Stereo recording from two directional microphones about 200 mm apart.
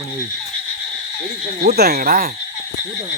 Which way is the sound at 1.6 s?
55° right (ahead or behind).